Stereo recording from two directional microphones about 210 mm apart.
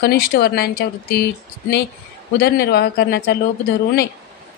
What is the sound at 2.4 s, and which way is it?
Speech, 50° left (ahead or behind).